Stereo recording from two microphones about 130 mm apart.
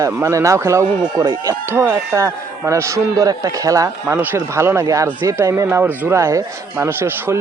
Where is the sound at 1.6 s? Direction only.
20° right (ahead or behind).